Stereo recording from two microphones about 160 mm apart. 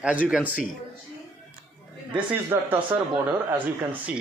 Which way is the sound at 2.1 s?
30° right (ahead or behind).